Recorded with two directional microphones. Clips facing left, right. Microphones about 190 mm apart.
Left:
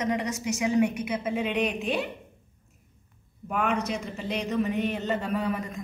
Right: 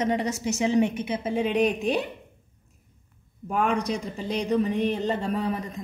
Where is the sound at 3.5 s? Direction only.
35° right (ahead or behind).